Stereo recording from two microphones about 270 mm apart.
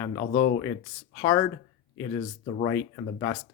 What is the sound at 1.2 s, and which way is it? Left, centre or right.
Speech, centre.